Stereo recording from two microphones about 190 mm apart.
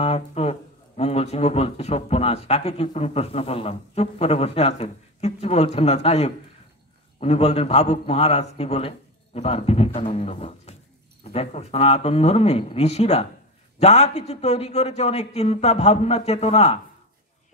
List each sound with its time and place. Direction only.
0.0 s speech: 30° left (ahead or behind)